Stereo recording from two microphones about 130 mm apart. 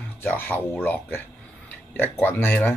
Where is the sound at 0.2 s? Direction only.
15° left (ahead or behind).